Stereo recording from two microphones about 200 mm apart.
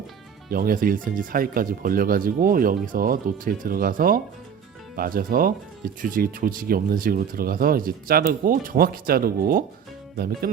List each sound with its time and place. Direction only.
0.5 s speech: 45° right (ahead or behind)